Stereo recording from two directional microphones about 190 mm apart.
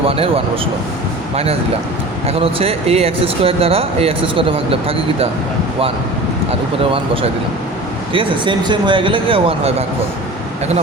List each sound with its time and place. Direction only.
0.0 s speech: 30° right (ahead or behind)
2.2 s speech: 30° right (ahead or behind)
6.9 s speech: 30° right (ahead or behind)